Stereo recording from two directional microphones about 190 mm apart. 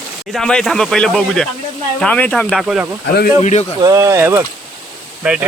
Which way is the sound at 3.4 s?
40° left (ahead or behind).